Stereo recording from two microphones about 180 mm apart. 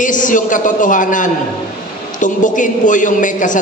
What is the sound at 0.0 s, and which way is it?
A man's voice, 45° left (ahead or behind).